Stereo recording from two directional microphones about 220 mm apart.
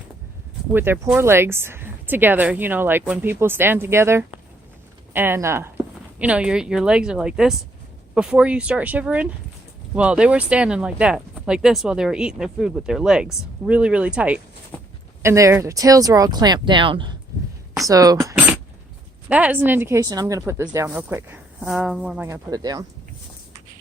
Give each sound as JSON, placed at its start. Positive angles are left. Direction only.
{"t": 0.7, "sound": "speech", "side_deg": -10}